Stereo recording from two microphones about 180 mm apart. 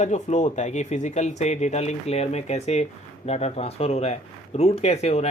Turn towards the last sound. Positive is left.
turn(degrees=35)  # may be behind; listen again after turning